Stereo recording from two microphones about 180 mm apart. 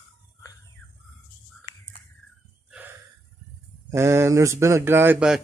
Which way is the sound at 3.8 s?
15° right (ahead or behind).